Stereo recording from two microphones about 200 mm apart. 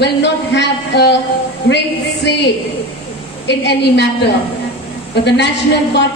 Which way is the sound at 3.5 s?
60° left (ahead or behind).